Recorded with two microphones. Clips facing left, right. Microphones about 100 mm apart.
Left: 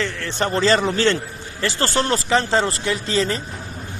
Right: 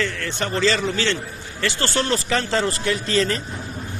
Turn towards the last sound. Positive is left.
turn(degrees=25)  # may be behind; listen again after turning